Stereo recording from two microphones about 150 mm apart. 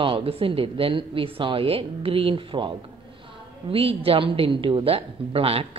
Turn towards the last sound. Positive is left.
turn(degrees=-40)  # may be behind; listen again after turning